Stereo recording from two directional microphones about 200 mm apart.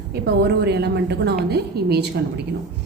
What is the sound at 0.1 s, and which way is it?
A woman's voice, 55° right (ahead or behind).